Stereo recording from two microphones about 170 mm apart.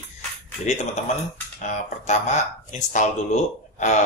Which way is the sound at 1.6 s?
45° left (ahead or behind).